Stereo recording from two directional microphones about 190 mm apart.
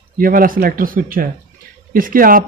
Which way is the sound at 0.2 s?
50° right (ahead or behind).